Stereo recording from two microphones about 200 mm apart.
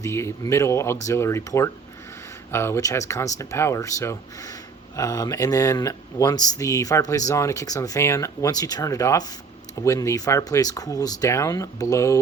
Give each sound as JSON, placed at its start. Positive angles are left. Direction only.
{"t": 0.0, "sound": "speech", "side_deg": 15}